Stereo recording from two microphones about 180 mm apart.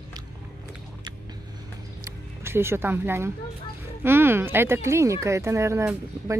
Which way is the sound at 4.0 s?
10° right (ahead or behind).